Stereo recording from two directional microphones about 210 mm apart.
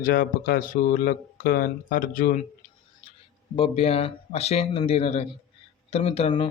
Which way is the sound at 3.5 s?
25° left (ahead or behind).